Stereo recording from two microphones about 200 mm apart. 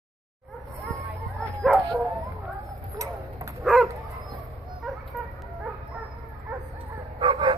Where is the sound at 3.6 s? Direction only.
5° left (ahead or behind).